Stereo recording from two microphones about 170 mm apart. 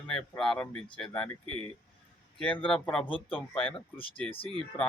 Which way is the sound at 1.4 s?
30° right (ahead or behind).